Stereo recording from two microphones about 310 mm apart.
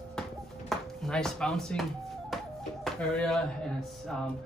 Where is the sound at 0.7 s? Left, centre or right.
Centre.